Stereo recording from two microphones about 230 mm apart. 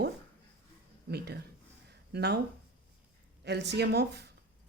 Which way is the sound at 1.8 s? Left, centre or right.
Right.